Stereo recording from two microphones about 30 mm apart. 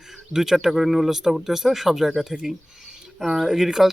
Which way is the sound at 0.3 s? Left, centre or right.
Centre.